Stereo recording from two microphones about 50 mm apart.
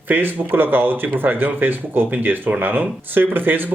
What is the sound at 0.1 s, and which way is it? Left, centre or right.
Speech, right.